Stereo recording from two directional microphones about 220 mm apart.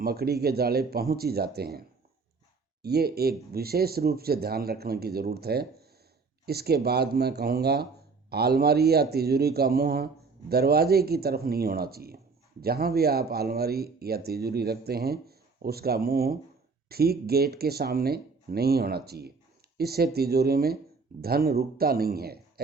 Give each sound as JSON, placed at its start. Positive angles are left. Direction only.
{"t": 0.0, "sound": "speech", "side_deg": -45}
{"t": 2.8, "sound": "speech", "side_deg": -45}